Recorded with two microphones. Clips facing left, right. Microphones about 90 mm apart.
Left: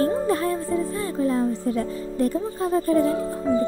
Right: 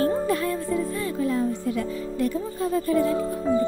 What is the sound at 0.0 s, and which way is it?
Music, 35° left (ahead or behind).